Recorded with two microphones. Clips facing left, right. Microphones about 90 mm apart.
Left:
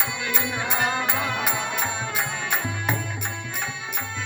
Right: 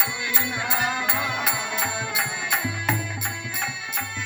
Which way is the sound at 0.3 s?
15° left (ahead or behind).